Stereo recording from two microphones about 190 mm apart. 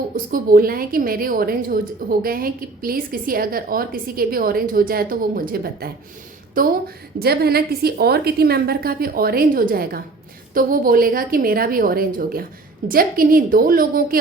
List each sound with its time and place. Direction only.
0.3 s a woman's voice: 50° right (ahead or behind)